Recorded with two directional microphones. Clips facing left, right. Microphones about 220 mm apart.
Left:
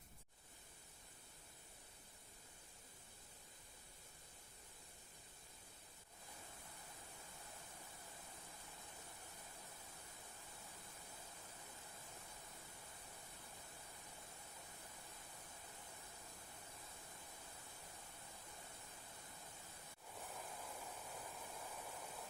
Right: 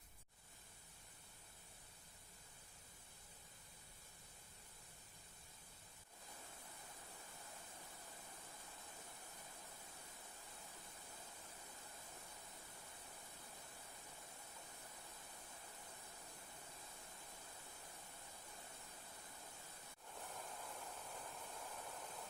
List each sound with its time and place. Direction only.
20.1 s pink noise: 5° left (ahead or behind)